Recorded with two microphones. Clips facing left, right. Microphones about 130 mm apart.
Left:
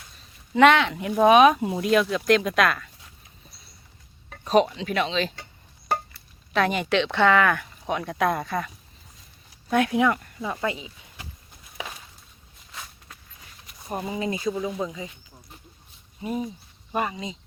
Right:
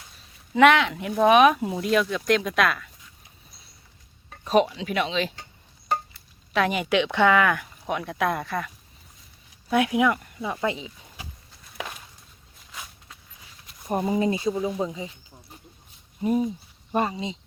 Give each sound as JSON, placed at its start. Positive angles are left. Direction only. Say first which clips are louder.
{"t": 0.5, "sound": "speech", "louder": "even", "side_deg": -5}
{"t": 4.4, "sound": "speech", "louder": "left 1 dB", "side_deg": -5}
{"t": 5.9, "sound": "a sound", "louder": "even", "side_deg": 60}
{"t": 6.5, "sound": "speech", "louder": "even", "side_deg": -10}
{"t": 10.7, "sound": "a sound", "louder": "right 1 dB", "side_deg": -25}
{"t": 13.8, "sound": "speech", "louder": "right 5 dB", "side_deg": -20}
{"t": 14.1, "sound": "speech", "louder": "right 3 dB", "side_deg": -35}
{"t": 16.9, "sound": "speech", "louder": "right 2 dB", "side_deg": -30}